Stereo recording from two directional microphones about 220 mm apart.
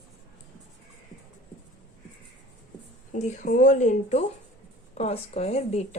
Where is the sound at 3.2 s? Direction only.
35° left (ahead or behind).